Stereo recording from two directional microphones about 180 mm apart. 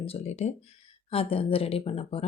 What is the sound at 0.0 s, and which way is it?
A woman's voice, 35° left (ahead or behind).